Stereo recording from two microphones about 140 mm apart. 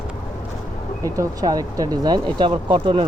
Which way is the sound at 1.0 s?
25° right (ahead or behind).